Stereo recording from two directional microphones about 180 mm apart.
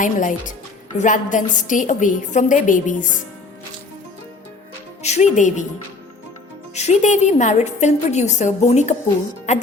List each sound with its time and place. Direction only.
0.0 s a woman's voice: 45° left (ahead or behind)
5.0 s a woman's voice: 40° left (ahead or behind)
6.7 s a woman's voice: 40° left (ahead or behind)